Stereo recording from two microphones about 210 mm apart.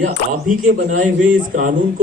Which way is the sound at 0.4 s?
40° right (ahead or behind).